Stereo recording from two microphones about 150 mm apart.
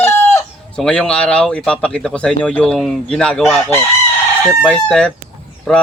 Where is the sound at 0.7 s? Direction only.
5° left (ahead or behind).